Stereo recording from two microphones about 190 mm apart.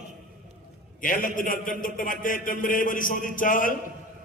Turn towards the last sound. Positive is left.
turn(degrees=45)  # may be behind; listen again after turning